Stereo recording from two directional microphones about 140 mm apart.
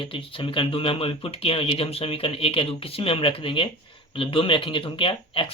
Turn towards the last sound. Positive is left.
turn(degrees=40)  # may be behind; listen again after turning